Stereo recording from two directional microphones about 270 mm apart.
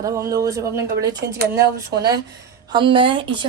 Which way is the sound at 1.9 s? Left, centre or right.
Right.